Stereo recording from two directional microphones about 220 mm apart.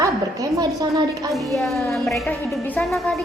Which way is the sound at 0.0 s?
15° right (ahead or behind).